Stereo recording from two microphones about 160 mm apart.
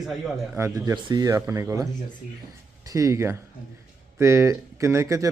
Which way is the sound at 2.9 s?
20° right (ahead or behind).